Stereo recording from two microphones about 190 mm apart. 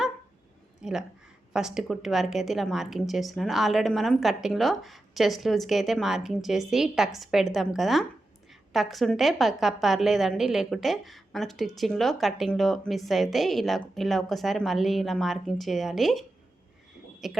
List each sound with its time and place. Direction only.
0.8 s a woman's voice: 5° right (ahead or behind)
17.2 s speech: centre (ahead or behind)